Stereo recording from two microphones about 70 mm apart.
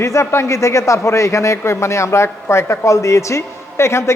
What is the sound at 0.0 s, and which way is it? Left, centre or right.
A man's voice, left.